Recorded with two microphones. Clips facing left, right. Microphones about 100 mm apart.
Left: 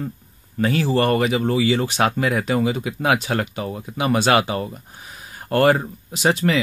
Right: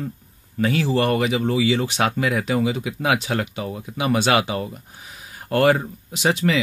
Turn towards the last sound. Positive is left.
turn(degrees=40)  # may be behind; listen again after turning